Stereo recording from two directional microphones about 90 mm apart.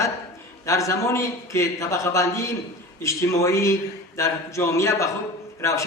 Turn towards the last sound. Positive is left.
turn(degrees=35)  # may be behind; listen again after turning